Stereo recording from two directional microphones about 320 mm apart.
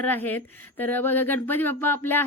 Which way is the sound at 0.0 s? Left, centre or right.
Centre.